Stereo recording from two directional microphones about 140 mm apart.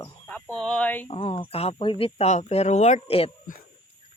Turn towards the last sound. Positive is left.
turn(degrees=50)  # may be behind; listen again after turning